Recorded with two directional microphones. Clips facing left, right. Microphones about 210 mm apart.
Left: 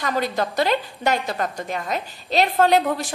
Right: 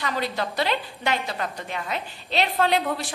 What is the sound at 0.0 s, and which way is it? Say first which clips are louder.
A woman's voice: left 4 dB; 45° left (ahead or behind).